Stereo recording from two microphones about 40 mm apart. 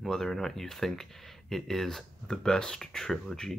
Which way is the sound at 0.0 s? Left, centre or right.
Centre.